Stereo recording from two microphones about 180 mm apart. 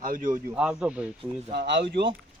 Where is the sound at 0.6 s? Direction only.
5° right (ahead or behind).